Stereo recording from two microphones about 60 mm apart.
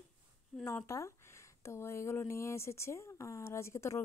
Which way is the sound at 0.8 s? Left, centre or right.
Left.